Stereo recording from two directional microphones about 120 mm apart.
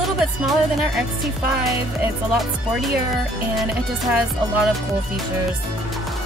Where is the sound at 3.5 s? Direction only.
Centre (ahead or behind).